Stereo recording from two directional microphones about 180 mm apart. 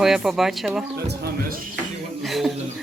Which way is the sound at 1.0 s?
60° right (ahead or behind).